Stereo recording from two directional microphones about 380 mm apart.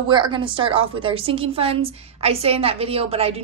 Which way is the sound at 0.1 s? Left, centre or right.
Centre.